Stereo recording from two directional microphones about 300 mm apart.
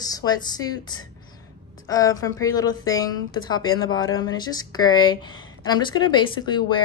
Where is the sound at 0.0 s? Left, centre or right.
Centre.